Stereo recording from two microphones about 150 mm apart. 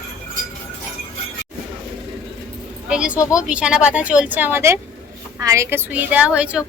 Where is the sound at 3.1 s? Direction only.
20° left (ahead or behind).